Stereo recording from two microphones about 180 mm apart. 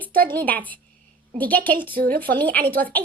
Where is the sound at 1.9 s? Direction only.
55° right (ahead or behind).